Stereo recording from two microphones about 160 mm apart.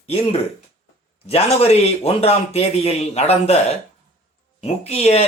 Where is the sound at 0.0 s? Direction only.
40° left (ahead or behind).